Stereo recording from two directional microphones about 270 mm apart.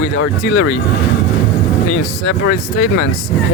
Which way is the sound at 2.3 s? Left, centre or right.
Left.